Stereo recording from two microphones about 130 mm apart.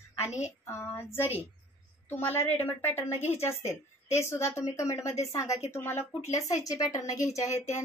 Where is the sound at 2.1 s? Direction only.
15° left (ahead or behind).